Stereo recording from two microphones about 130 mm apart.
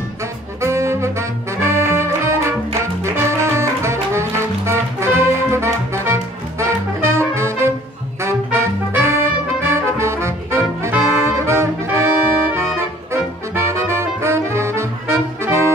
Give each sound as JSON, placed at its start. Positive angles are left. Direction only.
{"t": 0.6, "sound": "saxophone", "side_deg": -20}
{"t": 1.6, "sound": "music", "side_deg": -20}